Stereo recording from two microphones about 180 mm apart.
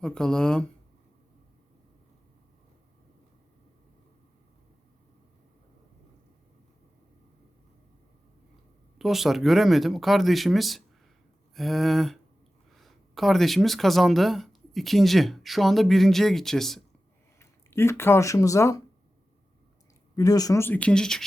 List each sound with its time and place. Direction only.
0.0 s speech: 5° left (ahead or behind)
9.0 s speech: centre (ahead or behind)
17.4 s speech: 15° left (ahead or behind)
20.1 s speech: 20° left (ahead or behind); by 21.2 s 5° left (ahead or behind)